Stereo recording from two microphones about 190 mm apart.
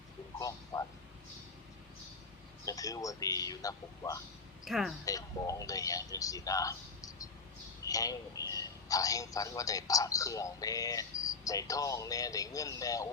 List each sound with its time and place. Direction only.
0.3 s a man's voice: 20° left (ahead or behind)
2.6 s speech: 20° left (ahead or behind)
4.6 s a woman's voice: centre (ahead or behind)
5.0 s speech: 20° left (ahead or behind)
7.9 s a man's voice: 20° left (ahead or behind)